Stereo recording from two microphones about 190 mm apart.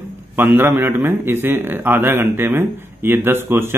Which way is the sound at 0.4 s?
10° right (ahead or behind).